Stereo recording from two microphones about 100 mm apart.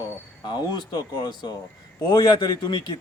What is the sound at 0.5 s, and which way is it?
A man's voice, 45° left (ahead or behind).